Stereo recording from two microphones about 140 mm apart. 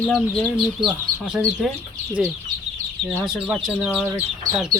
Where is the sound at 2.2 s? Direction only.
5° right (ahead or behind).